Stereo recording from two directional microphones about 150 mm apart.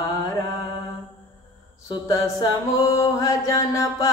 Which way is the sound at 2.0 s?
25° left (ahead or behind).